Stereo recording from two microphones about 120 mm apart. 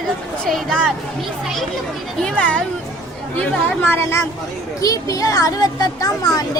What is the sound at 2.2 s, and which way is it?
A woman's voice, 10° left (ahead or behind).